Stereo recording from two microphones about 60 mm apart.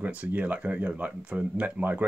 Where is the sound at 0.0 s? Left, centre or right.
Right.